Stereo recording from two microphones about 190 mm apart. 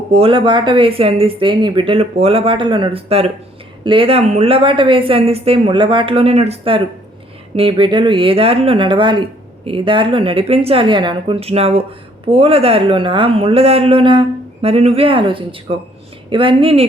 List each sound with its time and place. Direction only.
0.1 s speech: 30° right (ahead or behind)